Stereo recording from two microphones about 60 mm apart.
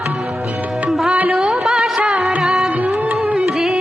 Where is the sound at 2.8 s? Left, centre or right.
Right.